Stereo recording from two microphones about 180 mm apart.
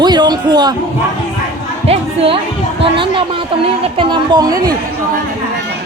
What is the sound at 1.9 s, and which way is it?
Speech, 30° right (ahead or behind).